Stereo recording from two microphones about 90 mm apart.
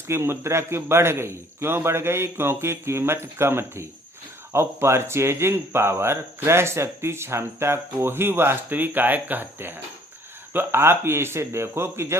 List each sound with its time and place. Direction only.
0.1 s speech: 30° right (ahead or behind)